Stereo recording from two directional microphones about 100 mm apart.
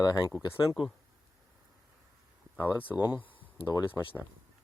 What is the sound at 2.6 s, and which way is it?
Speech, 20° left (ahead or behind).